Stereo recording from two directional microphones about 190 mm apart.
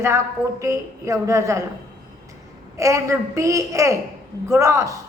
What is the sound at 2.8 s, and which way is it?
A woman's voice, 15° right (ahead or behind).